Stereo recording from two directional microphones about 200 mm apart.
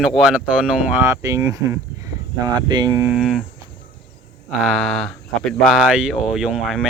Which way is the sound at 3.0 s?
5° right (ahead or behind).